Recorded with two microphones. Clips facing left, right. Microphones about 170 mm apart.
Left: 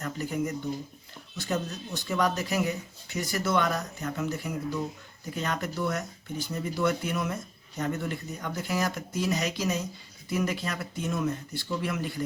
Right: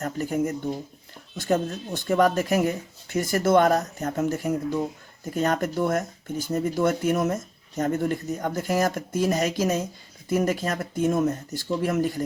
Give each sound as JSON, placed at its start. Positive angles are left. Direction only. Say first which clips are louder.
{"t": 0.0, "sound": "speech", "louder": "right 5 dB", "side_deg": -45}